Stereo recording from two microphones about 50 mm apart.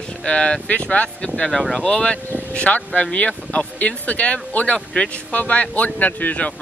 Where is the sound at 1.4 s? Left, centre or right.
Centre.